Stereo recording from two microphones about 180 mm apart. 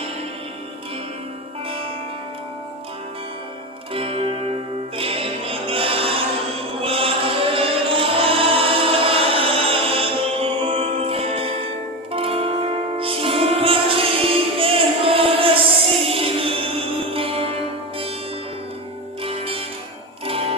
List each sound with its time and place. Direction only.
3.9 s zither: 30° right (ahead or behind)
4.9 s music: 30° right (ahead or behind)
6.8 s chant: 30° right (ahead or behind)
12.1 s music: 30° right (ahead or behind)
19.2 s music: 30° right (ahead or behind)